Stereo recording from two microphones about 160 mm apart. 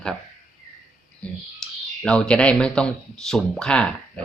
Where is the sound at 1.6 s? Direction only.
5° left (ahead or behind).